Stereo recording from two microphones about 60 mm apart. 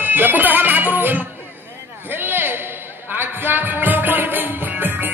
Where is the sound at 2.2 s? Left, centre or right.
Right.